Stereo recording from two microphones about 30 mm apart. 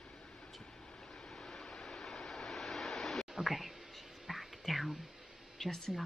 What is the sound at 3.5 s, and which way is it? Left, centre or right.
Speech, centre.